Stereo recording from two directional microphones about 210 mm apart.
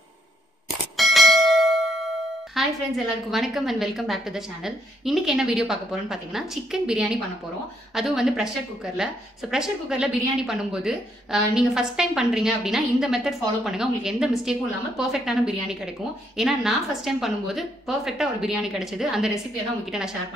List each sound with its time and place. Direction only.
0.9 s bell: centre (ahead or behind)
2.6 s a woman's voice: centre (ahead or behind)